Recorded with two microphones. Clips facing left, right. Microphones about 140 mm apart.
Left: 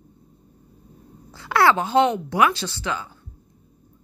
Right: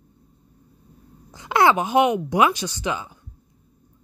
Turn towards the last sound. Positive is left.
turn(degrees=-15)  # may be behind; listen again after turning